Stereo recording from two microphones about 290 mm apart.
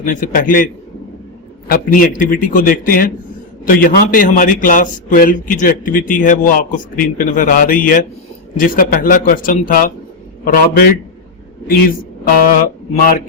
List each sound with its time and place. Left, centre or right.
0.0 s a man's voice: left
1.6 s a man's voice: left
12.3 s a man's voice: left